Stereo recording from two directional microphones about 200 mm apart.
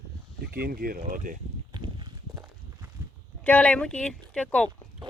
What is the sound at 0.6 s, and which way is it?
Speech, 45° right (ahead or behind).